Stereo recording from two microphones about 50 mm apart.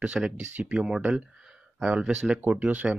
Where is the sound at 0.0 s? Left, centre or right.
Right.